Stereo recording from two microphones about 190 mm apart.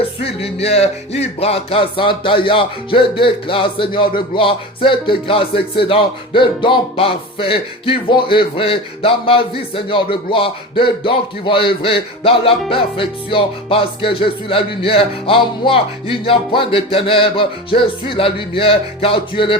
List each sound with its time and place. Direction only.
0.0 s music: 30° left (ahead or behind)